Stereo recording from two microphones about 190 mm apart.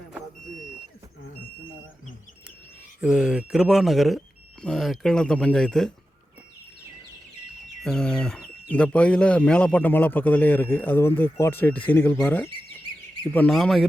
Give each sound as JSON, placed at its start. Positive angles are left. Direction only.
{"t": 3.0, "sound": "speech", "side_deg": -5}
{"t": 7.8, "sound": "a sound", "side_deg": 5}
{"t": 8.7, "sound": "a man's voice", "side_deg": 5}